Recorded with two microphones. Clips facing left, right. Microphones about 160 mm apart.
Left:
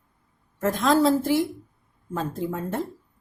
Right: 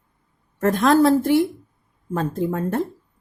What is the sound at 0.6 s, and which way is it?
A woman's voice, 60° right (ahead or behind).